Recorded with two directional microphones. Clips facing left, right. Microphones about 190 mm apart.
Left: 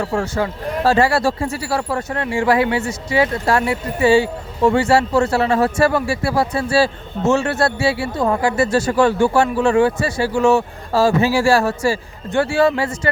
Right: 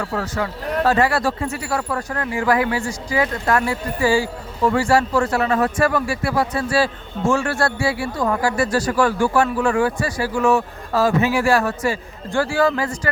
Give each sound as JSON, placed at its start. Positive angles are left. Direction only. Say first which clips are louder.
{"t": 0.0, "sound": "speech", "louder": "left 4 dB", "side_deg": 25}